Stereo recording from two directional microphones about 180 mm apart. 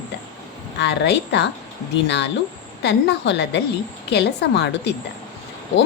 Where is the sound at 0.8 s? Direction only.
75° left (ahead or behind).